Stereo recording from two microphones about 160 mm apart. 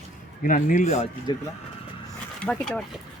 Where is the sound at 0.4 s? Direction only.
55° left (ahead or behind).